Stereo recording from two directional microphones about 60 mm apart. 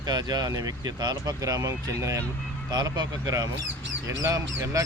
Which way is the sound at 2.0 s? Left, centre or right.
Right.